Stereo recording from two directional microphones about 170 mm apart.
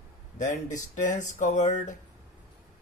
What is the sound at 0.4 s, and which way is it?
Speech, 45° left (ahead or behind).